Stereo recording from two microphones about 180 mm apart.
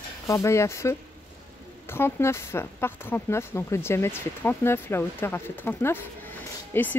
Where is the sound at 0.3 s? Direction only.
15° left (ahead or behind).